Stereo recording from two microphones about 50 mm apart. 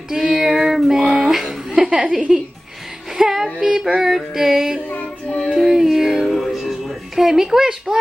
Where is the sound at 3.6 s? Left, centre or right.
Centre.